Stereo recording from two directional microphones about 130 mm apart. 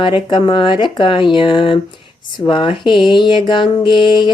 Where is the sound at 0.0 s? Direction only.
35° left (ahead or behind).